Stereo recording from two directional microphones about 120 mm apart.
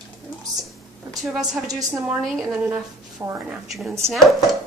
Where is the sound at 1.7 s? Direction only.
30° right (ahead or behind).